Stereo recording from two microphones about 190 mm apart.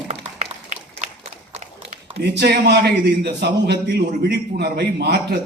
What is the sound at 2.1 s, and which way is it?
A man's voice, 60° right (ahead or behind).